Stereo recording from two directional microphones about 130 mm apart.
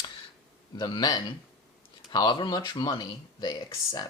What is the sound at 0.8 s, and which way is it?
Speech, 35° left (ahead or behind).